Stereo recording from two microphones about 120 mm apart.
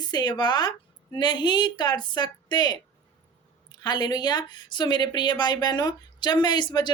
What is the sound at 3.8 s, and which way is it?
Speech, 35° left (ahead or behind).